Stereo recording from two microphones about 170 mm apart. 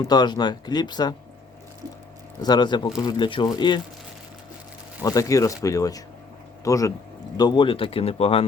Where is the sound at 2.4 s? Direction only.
25° left (ahead or behind).